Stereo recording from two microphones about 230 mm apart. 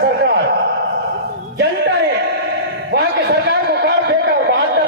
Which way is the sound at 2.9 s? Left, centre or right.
Right.